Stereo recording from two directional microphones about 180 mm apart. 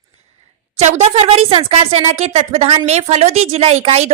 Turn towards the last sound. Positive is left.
turn(degrees=-35)  # may be behind; listen again after turning